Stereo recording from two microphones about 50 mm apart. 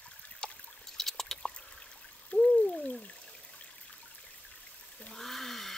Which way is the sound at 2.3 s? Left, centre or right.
Left.